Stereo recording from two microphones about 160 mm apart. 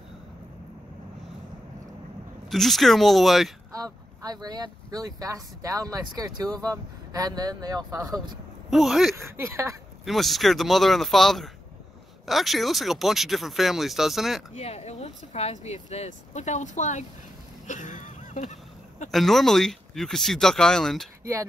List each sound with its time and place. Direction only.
2.5 s speech: centre (ahead or behind)
3.7 s speech: 25° right (ahead or behind)
8.6 s speech: centre (ahead or behind)
9.5 s speech: 15° right (ahead or behind)
10.0 s speech: centre (ahead or behind)
14.5 s speech: 40° left (ahead or behind)
17.6 s a sound: 50° left (ahead or behind)
19.1 s speech: centre (ahead or behind)